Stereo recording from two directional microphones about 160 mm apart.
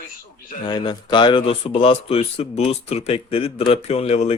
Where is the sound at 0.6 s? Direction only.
30° left (ahead or behind).